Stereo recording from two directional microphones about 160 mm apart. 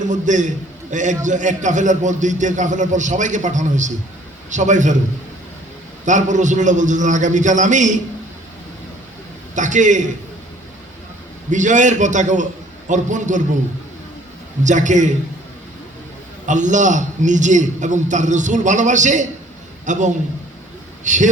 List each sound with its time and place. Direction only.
0.0 s a man's voice: 50° right (ahead or behind)
6.1 s a man's voice: 50° right (ahead or behind)
9.6 s a man's voice: 50° right (ahead or behind)
11.5 s a man's voice: 50° right (ahead or behind)
14.6 s a man's voice: 50° right (ahead or behind)
16.5 s a man's voice: 50° right (ahead or behind)